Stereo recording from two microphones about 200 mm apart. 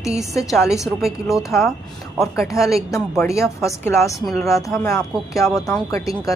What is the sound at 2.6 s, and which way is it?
Speech, 15° left (ahead or behind).